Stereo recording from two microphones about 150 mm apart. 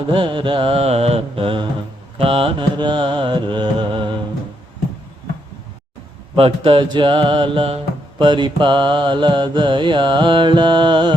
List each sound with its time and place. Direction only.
0.1 s mantra: 35° right (ahead or behind)
6.3 s mantra: 35° right (ahead or behind)